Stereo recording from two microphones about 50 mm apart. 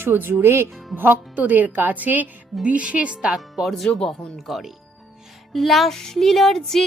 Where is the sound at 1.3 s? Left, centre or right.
Right.